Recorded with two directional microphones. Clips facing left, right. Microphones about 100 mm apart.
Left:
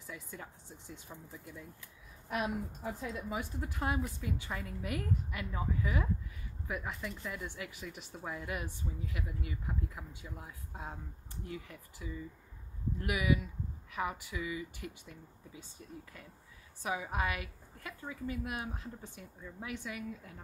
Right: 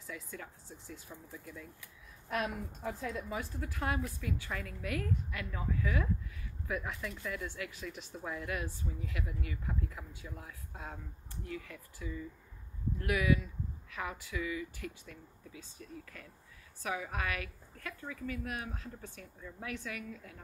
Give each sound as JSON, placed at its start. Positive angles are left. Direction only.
{"t": 0.0, "sound": "a woman's voice", "side_deg": 15}
{"t": 2.2, "sound": "a woman's voice", "side_deg": 10}
{"t": 6.7, "sound": "speech", "side_deg": 5}
{"t": 7.4, "sound": "a woman's voice", "side_deg": 15}
{"t": 16.8, "sound": "speech", "side_deg": 15}